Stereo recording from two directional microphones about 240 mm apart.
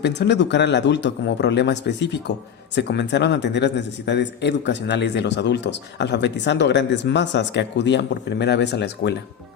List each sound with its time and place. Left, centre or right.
0.0 s a man's voice: left